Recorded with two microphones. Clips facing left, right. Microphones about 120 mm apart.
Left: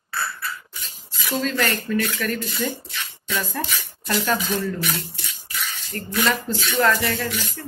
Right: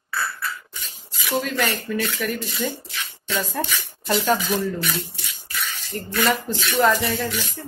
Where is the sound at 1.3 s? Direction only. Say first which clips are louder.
Even; 10° right (ahead or behind).